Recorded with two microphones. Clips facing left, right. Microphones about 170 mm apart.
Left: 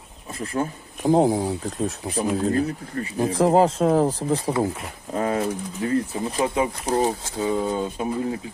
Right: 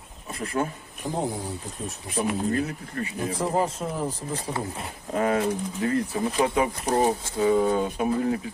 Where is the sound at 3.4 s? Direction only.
90° left; by 4.3 s 75° left (ahead or behind).